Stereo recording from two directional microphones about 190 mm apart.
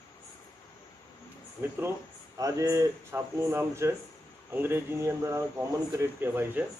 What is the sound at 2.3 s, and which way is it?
A man's voice, 20° right (ahead or behind).